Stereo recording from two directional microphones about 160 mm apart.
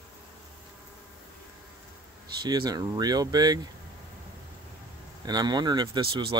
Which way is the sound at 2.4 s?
25° right (ahead or behind).